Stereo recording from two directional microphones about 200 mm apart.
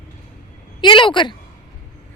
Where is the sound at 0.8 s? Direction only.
25° left (ahead or behind).